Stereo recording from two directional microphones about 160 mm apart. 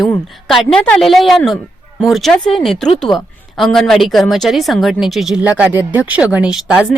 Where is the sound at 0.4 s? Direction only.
Centre (ahead or behind).